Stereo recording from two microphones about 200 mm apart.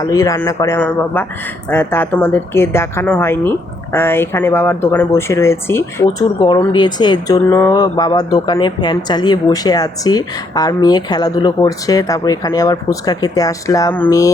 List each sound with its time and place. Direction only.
0.0 s speech: 15° left (ahead or behind)